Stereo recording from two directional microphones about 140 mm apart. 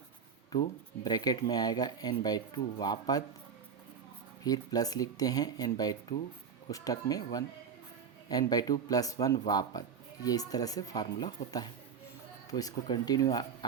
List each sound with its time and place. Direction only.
0.5 s speech: 25° left (ahead or behind)
4.4 s speech: 25° left (ahead or behind)
8.3 s speech: 25° left (ahead or behind)